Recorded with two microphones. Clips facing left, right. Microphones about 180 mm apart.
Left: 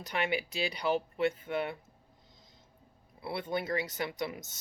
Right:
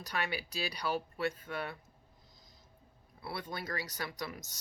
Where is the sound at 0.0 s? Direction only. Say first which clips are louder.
Left 5 dB; 20° left (ahead or behind).